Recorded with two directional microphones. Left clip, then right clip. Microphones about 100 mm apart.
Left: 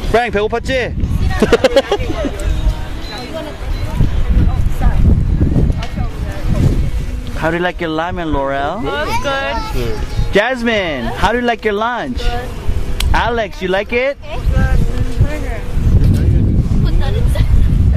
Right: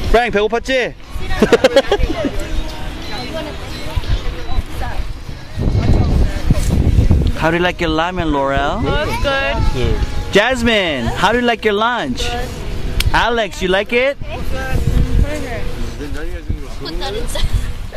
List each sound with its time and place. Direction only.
0.1 s speech: 10° right (ahead or behind)
2.0 s speech: centre (ahead or behind)
7.3 s speech: 20° right (ahead or behind)
8.8 s speech: centre (ahead or behind)
10.3 s speech: 20° right (ahead or behind)
16.8 s a sound: 40° right (ahead or behind)